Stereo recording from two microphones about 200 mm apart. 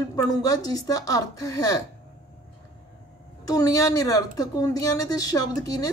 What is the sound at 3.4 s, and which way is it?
A woman's voice, 15° left (ahead or behind).